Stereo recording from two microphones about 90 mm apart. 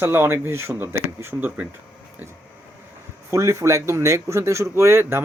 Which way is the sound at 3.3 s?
35° right (ahead or behind).